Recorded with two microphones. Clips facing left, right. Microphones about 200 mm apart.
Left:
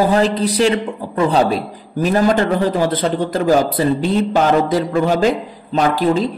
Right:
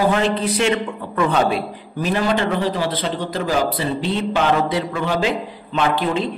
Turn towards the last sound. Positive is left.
turn(degrees=40)  # may be behind; listen again after turning